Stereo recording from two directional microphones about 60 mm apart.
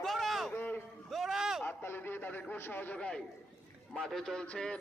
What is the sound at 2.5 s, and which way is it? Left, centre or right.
Speech, left.